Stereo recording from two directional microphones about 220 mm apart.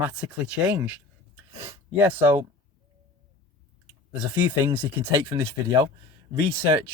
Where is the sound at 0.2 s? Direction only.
5° right (ahead or behind).